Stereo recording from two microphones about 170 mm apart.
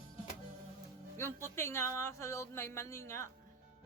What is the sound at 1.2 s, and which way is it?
Speech, 15° left (ahead or behind).